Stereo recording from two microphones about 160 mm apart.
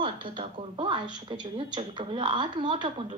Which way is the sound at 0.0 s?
30° right (ahead or behind).